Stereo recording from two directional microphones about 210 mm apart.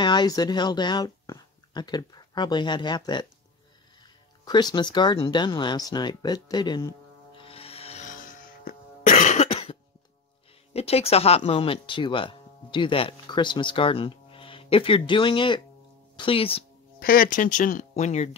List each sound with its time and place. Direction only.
0.0 s speech: 20° left (ahead or behind)
4.5 s speech: 20° left (ahead or behind)
7.4 s cough: 25° left (ahead or behind)
10.7 s speech: 30° left (ahead or behind)
17.0 s speech: 40° left (ahead or behind)